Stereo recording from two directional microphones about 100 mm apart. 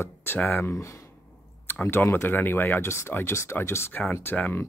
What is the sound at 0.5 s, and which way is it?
Speech, 25° left (ahead or behind).